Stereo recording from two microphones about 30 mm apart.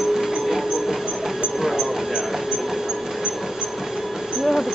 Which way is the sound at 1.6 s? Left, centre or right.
Centre.